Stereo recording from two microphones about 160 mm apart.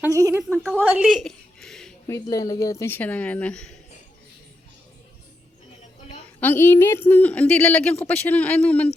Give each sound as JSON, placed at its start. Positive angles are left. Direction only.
{"t": 0.0, "sound": "a woman's voice", "side_deg": -20}
{"t": 0.8, "sound": "a sound", "side_deg": -10}
{"t": 2.3, "sound": "a woman's voice", "side_deg": 20}
{"t": 6.4, "sound": "a woman's voice", "side_deg": 15}